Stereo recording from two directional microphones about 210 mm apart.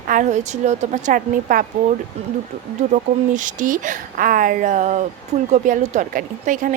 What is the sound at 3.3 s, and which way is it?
A woman's voice, 40° right (ahead or behind).